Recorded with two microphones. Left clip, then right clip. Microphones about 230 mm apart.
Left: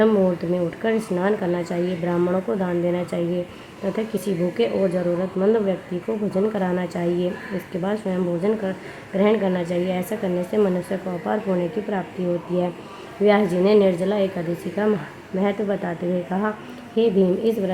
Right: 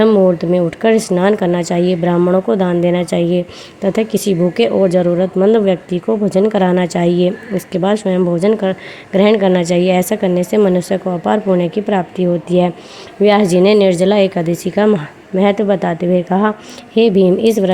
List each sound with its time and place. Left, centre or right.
0.0 s speech: right
13.2 s speech: right